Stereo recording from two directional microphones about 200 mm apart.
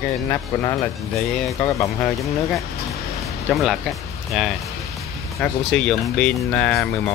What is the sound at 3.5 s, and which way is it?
Speech, centre (ahead or behind).